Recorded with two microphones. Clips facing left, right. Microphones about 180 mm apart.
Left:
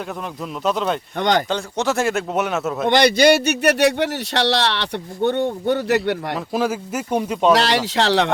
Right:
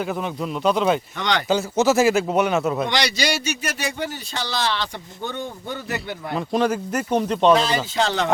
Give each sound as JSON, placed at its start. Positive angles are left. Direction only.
{"t": 0.6, "sound": "speech", "side_deg": 0}
{"t": 1.2, "sound": "speech", "side_deg": 45}
{"t": 1.5, "sound": "speech", "side_deg": -5}
{"t": 2.8, "sound": "a man's voice", "side_deg": 55}
{"t": 6.3, "sound": "speech", "side_deg": 5}
{"t": 7.5, "sound": "a man's voice", "side_deg": 80}